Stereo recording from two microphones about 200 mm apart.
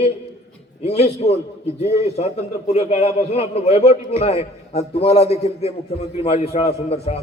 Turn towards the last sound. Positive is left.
turn(degrees=35)  # may be behind; listen again after turning